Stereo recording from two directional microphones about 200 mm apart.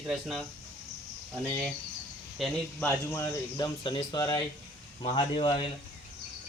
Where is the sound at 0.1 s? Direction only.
Centre (ahead or behind).